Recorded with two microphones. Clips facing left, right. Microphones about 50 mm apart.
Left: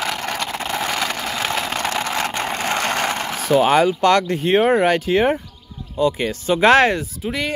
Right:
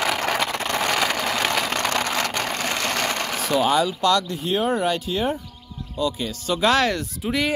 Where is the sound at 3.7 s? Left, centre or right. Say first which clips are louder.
Left 4 dB; left.